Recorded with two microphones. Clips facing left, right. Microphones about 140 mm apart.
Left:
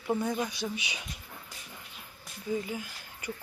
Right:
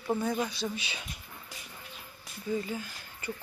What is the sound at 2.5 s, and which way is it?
Speech, 10° left (ahead or behind).